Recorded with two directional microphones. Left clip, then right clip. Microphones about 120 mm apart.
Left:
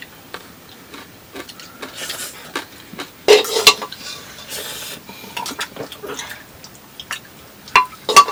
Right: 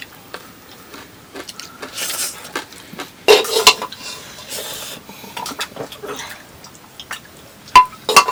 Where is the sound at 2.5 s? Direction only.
5° right (ahead or behind).